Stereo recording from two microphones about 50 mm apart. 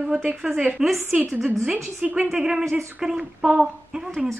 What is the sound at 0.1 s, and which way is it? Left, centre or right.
Speech, right.